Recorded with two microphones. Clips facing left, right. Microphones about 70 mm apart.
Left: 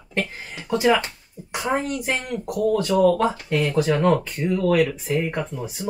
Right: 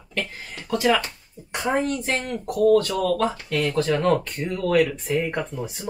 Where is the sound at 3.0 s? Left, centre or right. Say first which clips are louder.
Left 5 dB; left; by 5.7 s centre.